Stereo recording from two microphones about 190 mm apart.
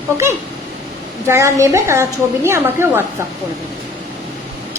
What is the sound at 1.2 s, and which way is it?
A woman's voice, 15° right (ahead or behind).